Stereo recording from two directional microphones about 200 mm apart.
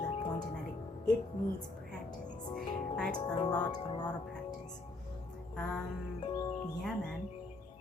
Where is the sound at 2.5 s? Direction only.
5° left (ahead or behind).